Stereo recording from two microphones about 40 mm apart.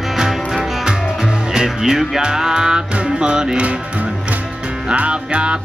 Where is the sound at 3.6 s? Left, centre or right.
Right.